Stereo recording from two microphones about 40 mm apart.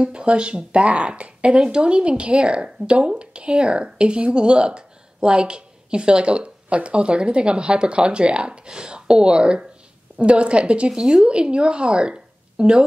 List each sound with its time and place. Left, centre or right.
0.0 s a woman's voice: right
10.9 s speech: centre
11.2 s a woman's voice: right